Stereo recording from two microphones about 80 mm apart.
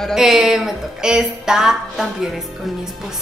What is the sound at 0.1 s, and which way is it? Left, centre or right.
Speech, centre.